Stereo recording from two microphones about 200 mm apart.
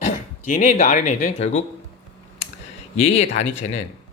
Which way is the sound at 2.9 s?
30° left (ahead or behind).